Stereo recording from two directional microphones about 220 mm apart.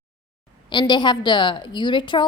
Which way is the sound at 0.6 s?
20° left (ahead or behind).